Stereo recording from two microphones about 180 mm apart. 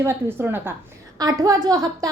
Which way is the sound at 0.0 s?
10° right (ahead or behind).